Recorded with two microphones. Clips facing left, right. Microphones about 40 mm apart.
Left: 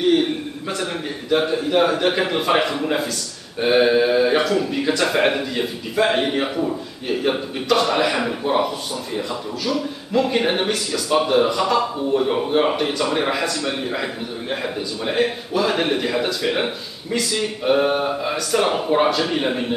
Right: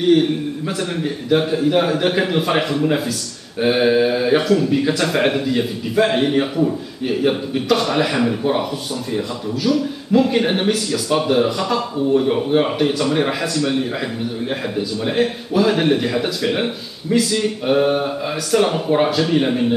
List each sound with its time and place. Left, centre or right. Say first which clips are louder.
0.0 s speech: right 3 dB; centre
9.7 s speech: right 6 dB; centre